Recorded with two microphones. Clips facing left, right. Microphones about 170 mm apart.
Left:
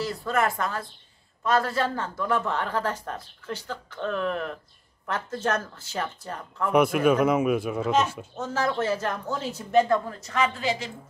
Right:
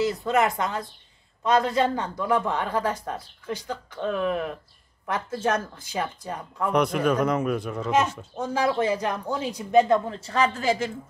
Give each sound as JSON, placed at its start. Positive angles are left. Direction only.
{"t": 0.0, "sound": "speech", "side_deg": -20}
{"t": 6.7, "sound": "a man's voice", "side_deg": 5}
{"t": 8.4, "sound": "a woman's voice", "side_deg": -10}